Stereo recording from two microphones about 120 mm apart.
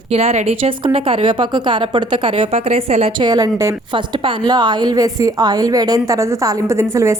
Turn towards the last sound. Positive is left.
turn(degrees=-25)  # may be behind; listen again after turning